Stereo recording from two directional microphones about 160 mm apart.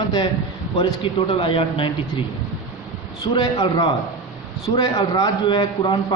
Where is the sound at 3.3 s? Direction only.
30° left (ahead or behind).